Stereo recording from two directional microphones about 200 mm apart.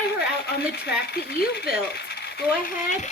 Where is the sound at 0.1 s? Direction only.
55° left (ahead or behind).